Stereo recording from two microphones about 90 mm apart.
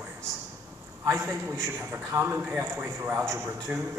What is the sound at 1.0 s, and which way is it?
A man's voice, 25° right (ahead or behind).